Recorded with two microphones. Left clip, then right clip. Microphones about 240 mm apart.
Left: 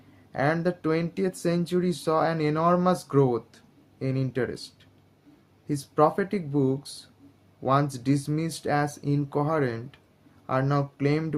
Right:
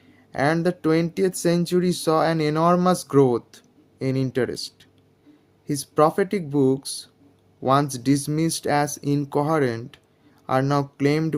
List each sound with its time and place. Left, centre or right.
0.3 s speech: right